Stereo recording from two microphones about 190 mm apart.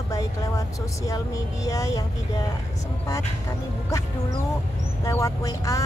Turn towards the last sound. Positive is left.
turn(degrees=15)  # may be behind; listen again after turning